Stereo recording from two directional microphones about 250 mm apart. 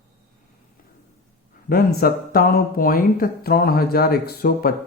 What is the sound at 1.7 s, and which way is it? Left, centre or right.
Speech, left.